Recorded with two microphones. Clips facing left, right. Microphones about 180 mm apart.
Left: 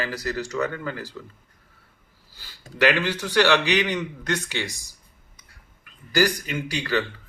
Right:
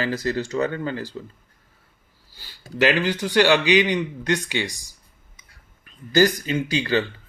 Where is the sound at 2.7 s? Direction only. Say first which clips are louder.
Right 1 dB; 20° right (ahead or behind).